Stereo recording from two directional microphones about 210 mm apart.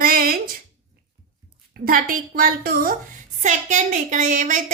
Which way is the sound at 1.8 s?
40° right (ahead or behind).